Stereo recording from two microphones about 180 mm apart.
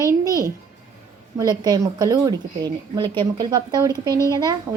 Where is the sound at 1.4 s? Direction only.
20° right (ahead or behind).